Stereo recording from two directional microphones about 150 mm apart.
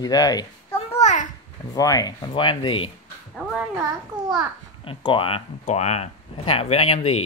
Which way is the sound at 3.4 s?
Centre (ahead or behind).